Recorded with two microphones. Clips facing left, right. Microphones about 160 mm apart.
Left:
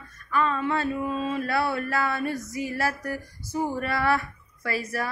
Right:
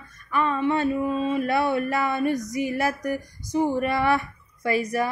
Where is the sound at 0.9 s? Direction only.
10° right (ahead or behind).